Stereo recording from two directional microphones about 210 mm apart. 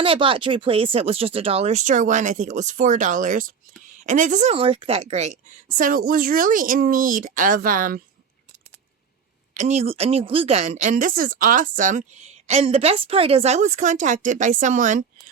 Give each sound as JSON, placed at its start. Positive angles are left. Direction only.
{"t": 0.0, "sound": "a woman's voice", "side_deg": -25}
{"t": 9.6, "sound": "a woman's voice", "side_deg": -30}